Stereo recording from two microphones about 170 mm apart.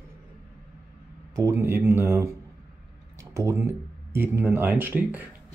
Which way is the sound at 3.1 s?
20° right (ahead or behind).